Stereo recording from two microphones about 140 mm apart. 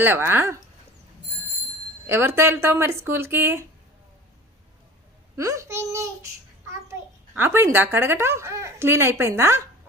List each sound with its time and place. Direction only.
0.0 s a woman's voice: 15° right (ahead or behind)
2.0 s a woman's voice: 20° right (ahead or behind)
5.4 s a child's voice: 20° right (ahead or behind)
7.3 s a woman's voice: 15° right (ahead or behind)